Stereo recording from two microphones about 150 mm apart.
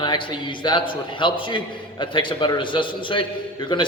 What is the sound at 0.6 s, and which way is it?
Speech, 30° left (ahead or behind).